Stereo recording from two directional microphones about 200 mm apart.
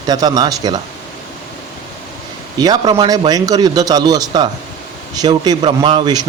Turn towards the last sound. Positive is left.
turn(degrees=-25)  # may be behind; listen again after turning